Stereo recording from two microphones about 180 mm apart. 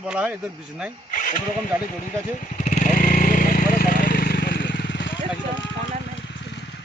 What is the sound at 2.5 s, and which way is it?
Vehicle, 45° left (ahead or behind).